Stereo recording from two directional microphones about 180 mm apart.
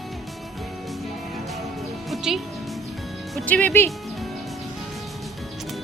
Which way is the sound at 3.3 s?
10° left (ahead or behind).